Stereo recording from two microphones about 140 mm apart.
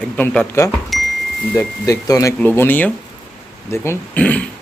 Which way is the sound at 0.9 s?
Centre (ahead or behind).